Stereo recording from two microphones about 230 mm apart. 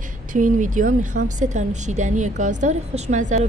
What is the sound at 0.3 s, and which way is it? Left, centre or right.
A woman's voice, right.